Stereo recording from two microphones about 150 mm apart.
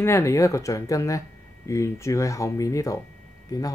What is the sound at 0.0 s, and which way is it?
Speech, 20° left (ahead or behind).